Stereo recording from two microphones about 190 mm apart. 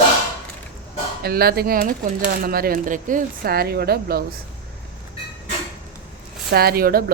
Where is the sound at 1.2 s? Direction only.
55° right (ahead or behind).